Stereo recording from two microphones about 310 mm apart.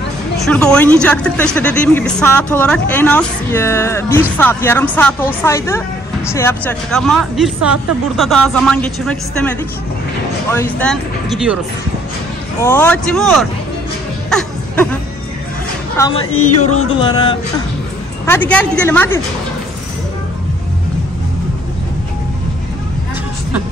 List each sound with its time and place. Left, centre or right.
0.5 s speech: centre
10.5 s speech: centre
12.6 s speech: centre
14.3 s music: centre
16.3 s speech: left
17.0 s a woman's voice: centre